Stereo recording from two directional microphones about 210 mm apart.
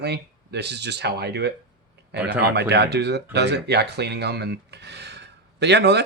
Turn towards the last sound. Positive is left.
turn(degrees=-55)  # may be behind; listen again after turning